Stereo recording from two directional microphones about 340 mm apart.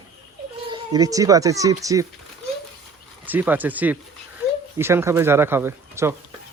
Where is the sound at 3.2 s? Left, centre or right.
Centre.